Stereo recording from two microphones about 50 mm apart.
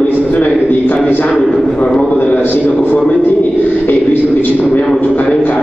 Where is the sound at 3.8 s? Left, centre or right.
Left.